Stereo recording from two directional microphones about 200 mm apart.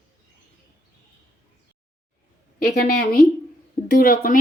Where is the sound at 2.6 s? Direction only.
50° left (ahead or behind).